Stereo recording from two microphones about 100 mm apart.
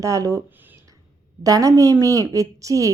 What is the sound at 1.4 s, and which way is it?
Speech, 35° right (ahead or behind).